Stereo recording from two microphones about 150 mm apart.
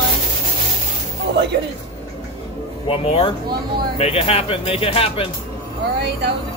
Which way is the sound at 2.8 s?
40° left (ahead or behind).